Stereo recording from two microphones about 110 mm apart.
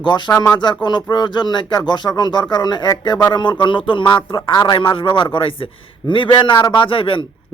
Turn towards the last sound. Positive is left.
turn(degrees=55)  # may be behind; listen again after turning